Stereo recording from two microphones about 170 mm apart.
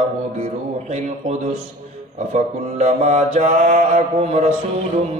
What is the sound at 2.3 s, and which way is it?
Mantra, 40° right (ahead or behind).